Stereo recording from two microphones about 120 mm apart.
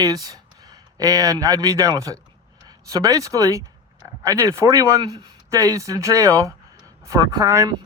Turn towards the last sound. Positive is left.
turn(degrees=-30)  # may be behind; listen again after turning